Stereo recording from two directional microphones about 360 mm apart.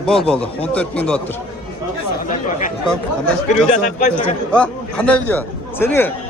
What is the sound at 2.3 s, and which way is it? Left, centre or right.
Chatter, left.